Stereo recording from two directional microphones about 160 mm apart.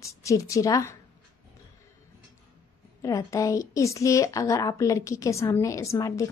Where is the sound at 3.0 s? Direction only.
20° left (ahead or behind).